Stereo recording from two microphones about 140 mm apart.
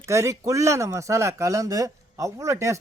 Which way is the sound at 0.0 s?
20° right (ahead or behind).